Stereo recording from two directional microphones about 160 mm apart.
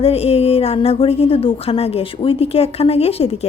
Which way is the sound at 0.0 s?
40° left (ahead or behind).